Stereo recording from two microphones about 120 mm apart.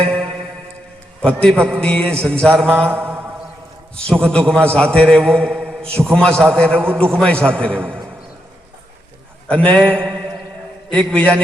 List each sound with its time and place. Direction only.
0.0 s music: 10° left (ahead or behind)
1.2 s a man's voice: 5° left (ahead or behind)
2.9 s mantra: 20° right (ahead or behind)
3.9 s a man's voice: 5° left (ahead or behind)
9.5 s a man's voice: 10° left (ahead or behind)